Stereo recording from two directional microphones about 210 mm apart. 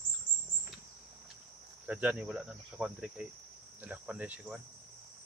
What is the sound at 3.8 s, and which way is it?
Speech, 5° right (ahead or behind).